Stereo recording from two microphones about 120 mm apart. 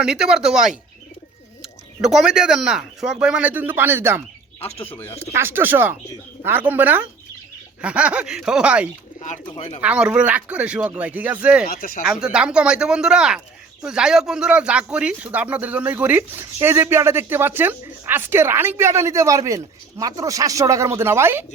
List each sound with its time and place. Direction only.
0.0 s speech: 5° right (ahead or behind)
4.9 s speech: 15° left (ahead or behind)
5.2 s speech: 20° right (ahead or behind)
9.2 s speech: 90° left
9.8 s speech: 10° right (ahead or behind)